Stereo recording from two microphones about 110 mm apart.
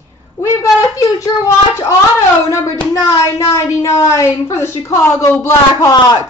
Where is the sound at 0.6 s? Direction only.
35° left (ahead or behind).